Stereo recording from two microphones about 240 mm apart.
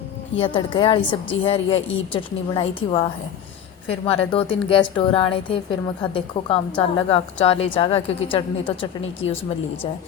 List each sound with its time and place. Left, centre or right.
0.3 s a woman's voice: left